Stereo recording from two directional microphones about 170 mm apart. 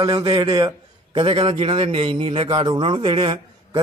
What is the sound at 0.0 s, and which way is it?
A man's voice, 25° right (ahead or behind).